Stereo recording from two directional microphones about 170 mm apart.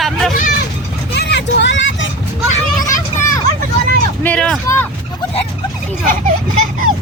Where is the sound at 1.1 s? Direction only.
80° left.